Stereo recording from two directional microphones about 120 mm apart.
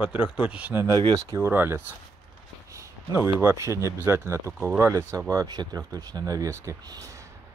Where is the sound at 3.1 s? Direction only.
20° right (ahead or behind).